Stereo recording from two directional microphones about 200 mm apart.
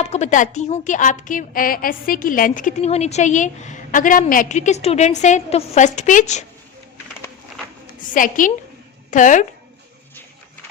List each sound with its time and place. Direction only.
0.0 s a woman's voice: 35° left (ahead or behind)
8.1 s a woman's voice: 40° left (ahead or behind)